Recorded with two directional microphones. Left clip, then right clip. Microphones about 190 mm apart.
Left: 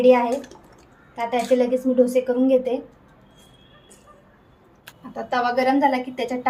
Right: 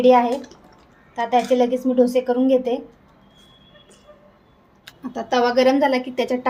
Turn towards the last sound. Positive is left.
turn(degrees=-50)  # may be behind; listen again after turning